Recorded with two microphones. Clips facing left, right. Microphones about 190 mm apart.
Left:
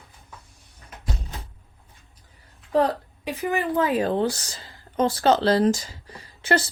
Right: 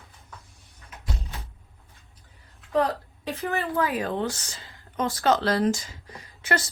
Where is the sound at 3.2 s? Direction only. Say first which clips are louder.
Left 3 dB; 15° left (ahead or behind).